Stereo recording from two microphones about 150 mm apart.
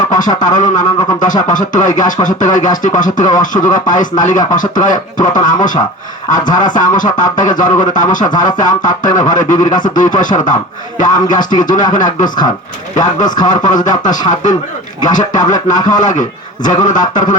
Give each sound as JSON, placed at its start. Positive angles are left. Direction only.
{"t": 0.1, "sound": "music", "side_deg": 60}
{"t": 6.7, "sound": "music", "side_deg": 60}
{"t": 13.5, "sound": "music", "side_deg": 55}